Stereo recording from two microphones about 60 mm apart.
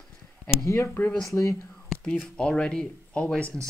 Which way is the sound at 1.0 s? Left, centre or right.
Left.